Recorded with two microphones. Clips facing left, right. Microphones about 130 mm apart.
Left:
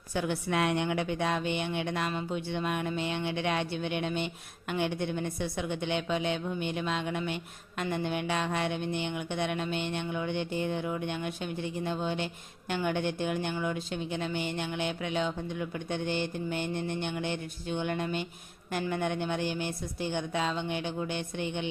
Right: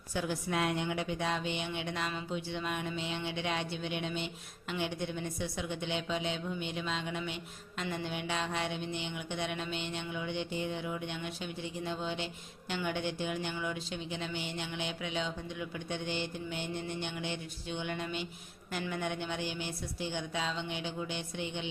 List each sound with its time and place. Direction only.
0.1 s a woman's voice: 65° left (ahead or behind)